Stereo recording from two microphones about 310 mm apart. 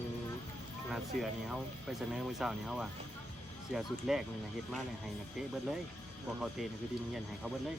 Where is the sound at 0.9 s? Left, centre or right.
Centre.